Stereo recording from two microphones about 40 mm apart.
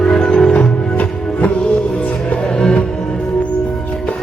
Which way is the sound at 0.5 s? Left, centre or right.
Left.